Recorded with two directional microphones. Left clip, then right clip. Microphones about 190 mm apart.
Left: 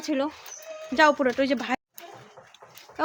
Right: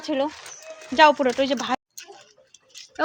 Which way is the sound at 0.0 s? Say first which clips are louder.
Right 3 dB; 20° left (ahead or behind).